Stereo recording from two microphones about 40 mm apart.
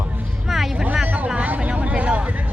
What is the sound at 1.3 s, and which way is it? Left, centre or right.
Speech, right.